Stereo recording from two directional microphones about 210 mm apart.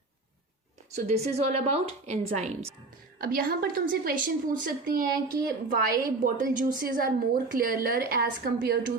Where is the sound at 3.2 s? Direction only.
45° right (ahead or behind).